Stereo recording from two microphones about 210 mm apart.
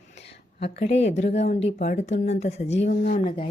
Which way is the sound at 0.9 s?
30° left (ahead or behind).